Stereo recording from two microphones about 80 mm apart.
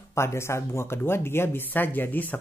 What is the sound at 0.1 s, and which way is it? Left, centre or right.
Speech, left.